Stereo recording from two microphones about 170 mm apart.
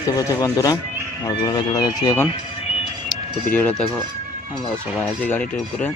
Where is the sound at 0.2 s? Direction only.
20° left (ahead or behind).